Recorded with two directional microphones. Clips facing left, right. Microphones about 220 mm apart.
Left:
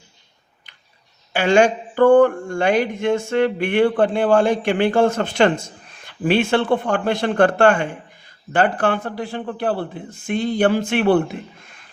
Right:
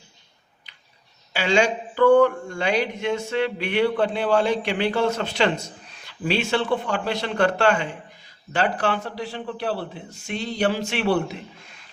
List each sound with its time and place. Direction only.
1.3 s speech: 55° left (ahead or behind)